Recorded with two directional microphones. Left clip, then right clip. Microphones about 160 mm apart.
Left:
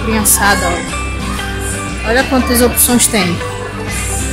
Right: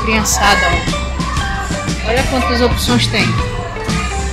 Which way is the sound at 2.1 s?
45° left (ahead or behind).